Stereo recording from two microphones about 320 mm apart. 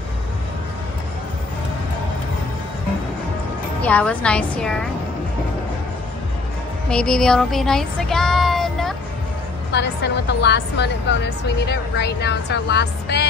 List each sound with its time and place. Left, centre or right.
3.8 s a woman's voice: centre
6.9 s child singing: centre
9.7 s a woman's voice: left